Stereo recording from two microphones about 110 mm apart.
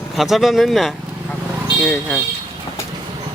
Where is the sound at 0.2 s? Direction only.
Centre (ahead or behind).